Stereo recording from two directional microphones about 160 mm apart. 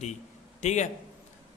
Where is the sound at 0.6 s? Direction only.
45° left (ahead or behind).